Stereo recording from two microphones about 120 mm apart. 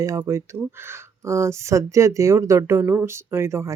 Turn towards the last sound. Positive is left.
turn(degrees=-25)  # may be behind; listen again after turning